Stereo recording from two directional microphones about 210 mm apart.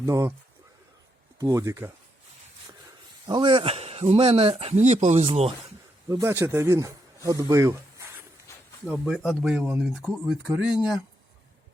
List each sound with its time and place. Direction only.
0.0 s speech: 15° right (ahead or behind)
1.4 s speech: 15° right (ahead or behind)
3.2 s speech: 20° right (ahead or behind)
6.1 s speech: 15° right (ahead or behind)
8.5 s a sound: 10° left (ahead or behind)
8.9 s speech: centre (ahead or behind)